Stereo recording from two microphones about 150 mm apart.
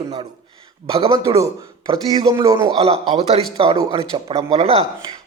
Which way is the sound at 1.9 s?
25° right (ahead or behind).